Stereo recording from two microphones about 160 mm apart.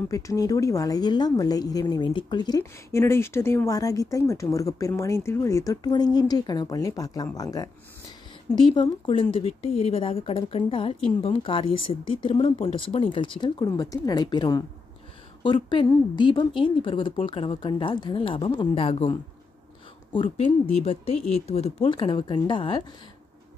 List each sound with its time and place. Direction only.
0.1 s a woman's voice: 20° left (ahead or behind)
8.7 s a woman's voice: 30° left (ahead or behind)
20.4 s a woman's voice: 40° left (ahead or behind)